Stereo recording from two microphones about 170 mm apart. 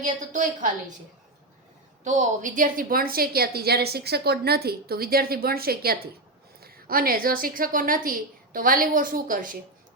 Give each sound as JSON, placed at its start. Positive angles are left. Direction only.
{"t": 0.0, "sound": "a woman's voice", "side_deg": -50}
{"t": 2.0, "sound": "a woman's voice", "side_deg": -45}